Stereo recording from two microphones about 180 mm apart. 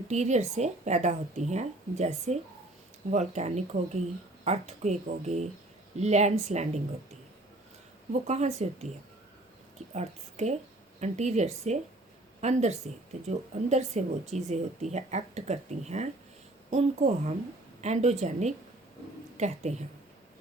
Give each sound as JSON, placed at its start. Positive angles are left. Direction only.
{"t": 0.1, "sound": "speech", "side_deg": -40}
{"t": 8.1, "sound": "speech", "side_deg": -40}